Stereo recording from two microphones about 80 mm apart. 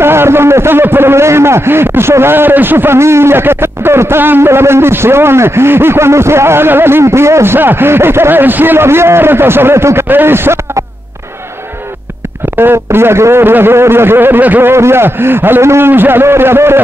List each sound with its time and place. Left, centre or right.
0.0 s a man's voice: right
12.5 s a man's voice: right